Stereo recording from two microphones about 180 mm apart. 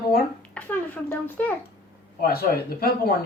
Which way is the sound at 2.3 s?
55° left (ahead or behind).